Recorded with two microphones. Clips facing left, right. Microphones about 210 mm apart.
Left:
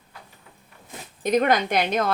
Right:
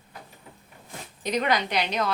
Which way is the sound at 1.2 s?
50° left (ahead or behind).